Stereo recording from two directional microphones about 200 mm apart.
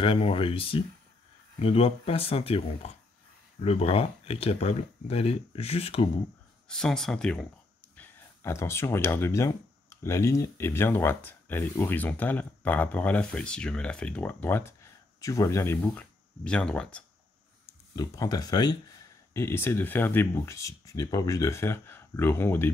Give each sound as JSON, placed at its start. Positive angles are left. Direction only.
{"t": 0.0, "sound": "speech", "side_deg": 25}
{"t": 6.7, "sound": "speech", "side_deg": 5}
{"t": 17.6, "sound": "speech", "side_deg": 15}